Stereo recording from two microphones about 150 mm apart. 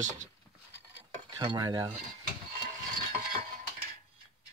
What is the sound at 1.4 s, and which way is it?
Cutlery, 30° right (ahead or behind).